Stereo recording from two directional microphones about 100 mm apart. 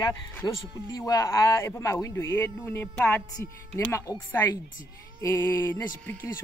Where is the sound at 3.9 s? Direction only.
30° left (ahead or behind).